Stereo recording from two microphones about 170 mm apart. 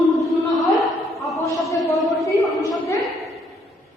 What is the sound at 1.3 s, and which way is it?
Speech, 20° left (ahead or behind).